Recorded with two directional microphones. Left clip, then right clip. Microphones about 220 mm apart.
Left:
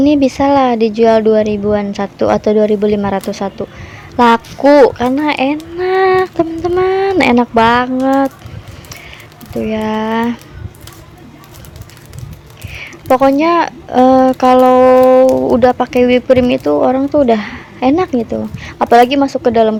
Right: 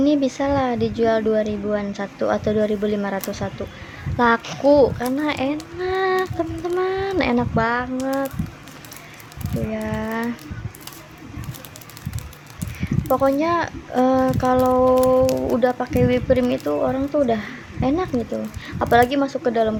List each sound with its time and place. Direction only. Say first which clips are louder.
0.0 s a woman's voice: left 9 dB; 30° left (ahead or behind)
9.6 s a woman's voice: left 11 dB; 40° left (ahead or behind)
12.7 s a woman's voice: left 9 dB; 35° left (ahead or behind)